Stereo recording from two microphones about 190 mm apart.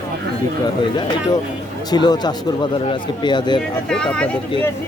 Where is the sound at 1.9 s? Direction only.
20° left (ahead or behind).